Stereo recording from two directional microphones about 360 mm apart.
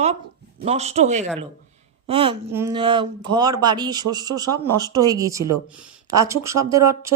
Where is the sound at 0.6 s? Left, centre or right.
Centre.